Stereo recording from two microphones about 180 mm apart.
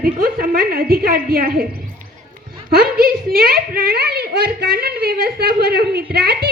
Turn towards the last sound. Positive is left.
turn(degrees=-60)  # may be behind; listen again after turning